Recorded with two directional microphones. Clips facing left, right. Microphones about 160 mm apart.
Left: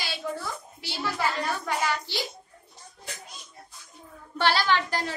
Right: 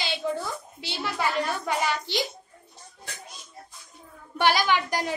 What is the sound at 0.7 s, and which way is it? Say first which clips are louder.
A child's voice: even; 20° right (ahead or behind).